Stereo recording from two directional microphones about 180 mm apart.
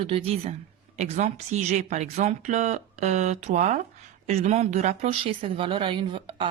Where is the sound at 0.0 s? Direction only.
30° right (ahead or behind).